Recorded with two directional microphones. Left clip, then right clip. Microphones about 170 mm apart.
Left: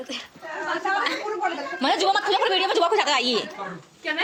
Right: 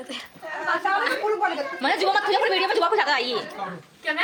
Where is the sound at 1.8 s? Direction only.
35° left (ahead or behind).